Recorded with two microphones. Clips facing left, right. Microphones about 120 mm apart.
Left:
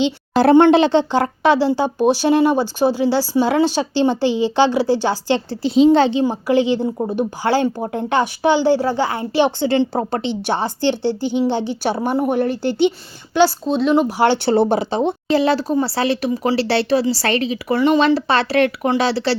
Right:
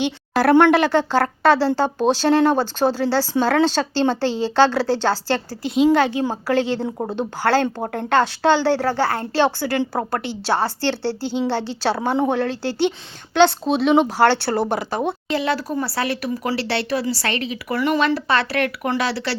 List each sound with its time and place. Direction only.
0.0 s speech: 20° left (ahead or behind)
5.5 s a woman's voice: 30° left (ahead or behind)
6.5 s speech: 15° left (ahead or behind)
13.7 s speech: centre (ahead or behind)
14.1 s speech: 15° left (ahead or behind)
14.5 s a woman's voice: 30° left (ahead or behind)